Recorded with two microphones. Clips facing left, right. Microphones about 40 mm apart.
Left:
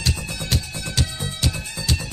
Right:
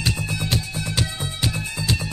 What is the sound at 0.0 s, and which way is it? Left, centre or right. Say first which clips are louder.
Music: right 2 dB; centre.